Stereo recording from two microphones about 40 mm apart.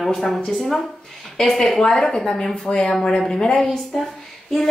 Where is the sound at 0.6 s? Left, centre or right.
Centre.